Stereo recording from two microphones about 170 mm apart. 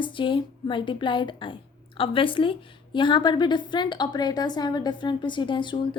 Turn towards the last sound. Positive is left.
turn(degrees=30)  # may be behind; listen again after turning